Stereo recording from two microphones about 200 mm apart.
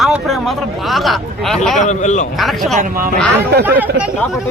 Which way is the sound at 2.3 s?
Centre (ahead or behind).